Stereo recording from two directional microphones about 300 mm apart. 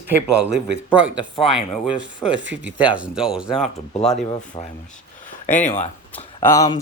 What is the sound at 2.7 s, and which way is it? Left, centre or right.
Speech, centre.